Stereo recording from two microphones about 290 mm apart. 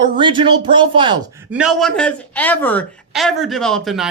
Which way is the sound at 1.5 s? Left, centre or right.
Centre.